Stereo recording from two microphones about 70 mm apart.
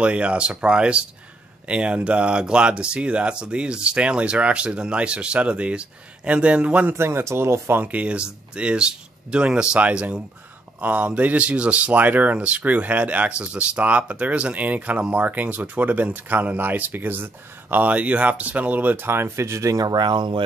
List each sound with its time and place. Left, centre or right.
0.0 s speech: centre
6.9 s speech: right
7.8 s speech: right
19.8 s speech: right